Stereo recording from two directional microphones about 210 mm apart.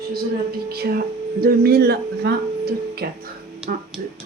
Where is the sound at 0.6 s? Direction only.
45° right (ahead or behind).